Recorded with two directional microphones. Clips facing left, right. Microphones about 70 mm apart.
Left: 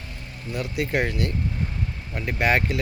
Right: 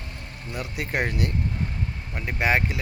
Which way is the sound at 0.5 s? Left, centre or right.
Right.